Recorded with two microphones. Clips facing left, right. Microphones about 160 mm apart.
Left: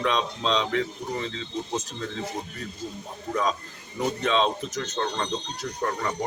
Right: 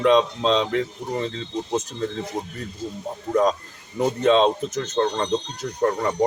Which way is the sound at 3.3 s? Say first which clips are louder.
Right 7 dB; 45° right (ahead or behind).